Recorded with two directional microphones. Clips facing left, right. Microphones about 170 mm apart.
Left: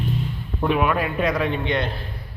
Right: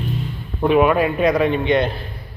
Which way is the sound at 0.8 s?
5° right (ahead or behind).